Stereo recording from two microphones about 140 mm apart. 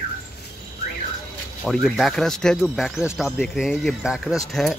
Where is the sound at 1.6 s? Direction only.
Centre (ahead or behind).